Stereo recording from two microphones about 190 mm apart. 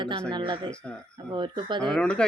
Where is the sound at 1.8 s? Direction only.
5° left (ahead or behind).